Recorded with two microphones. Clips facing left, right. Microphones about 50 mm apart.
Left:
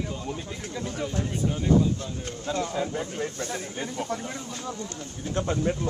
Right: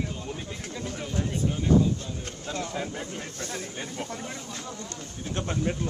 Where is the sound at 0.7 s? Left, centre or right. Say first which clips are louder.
Left 4 dB; left.